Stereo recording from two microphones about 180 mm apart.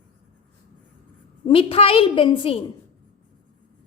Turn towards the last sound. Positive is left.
turn(degrees=30)  # may be behind; listen again after turning